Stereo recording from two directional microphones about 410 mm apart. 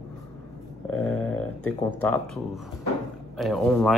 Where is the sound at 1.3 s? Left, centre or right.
Left.